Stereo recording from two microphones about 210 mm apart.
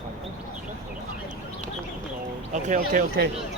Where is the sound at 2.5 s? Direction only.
35° right (ahead or behind).